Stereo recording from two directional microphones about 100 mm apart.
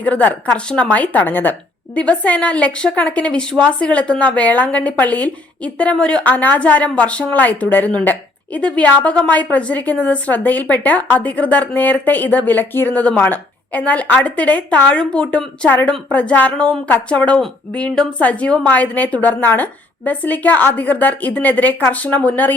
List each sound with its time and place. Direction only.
0.0 s a woman's voice: 15° left (ahead or behind)